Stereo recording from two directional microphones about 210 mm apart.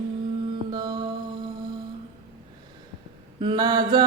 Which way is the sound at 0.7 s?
20° right (ahead or behind).